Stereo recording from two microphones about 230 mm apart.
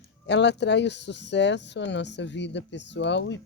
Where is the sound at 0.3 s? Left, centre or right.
Left.